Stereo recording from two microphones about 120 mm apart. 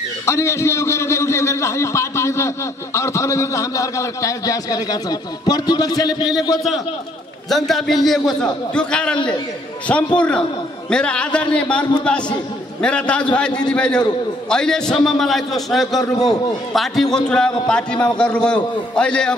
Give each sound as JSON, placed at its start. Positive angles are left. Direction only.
{"t": 0.2, "sound": "a man's voice", "side_deg": 25}
{"t": 7.4, "sound": "a man's voice", "side_deg": 0}